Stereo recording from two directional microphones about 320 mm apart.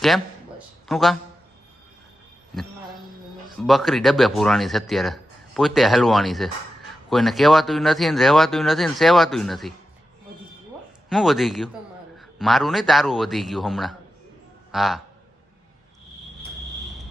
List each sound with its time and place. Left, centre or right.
0.9 s speech: centre
3.6 s speech: centre
11.1 s a man's voice: centre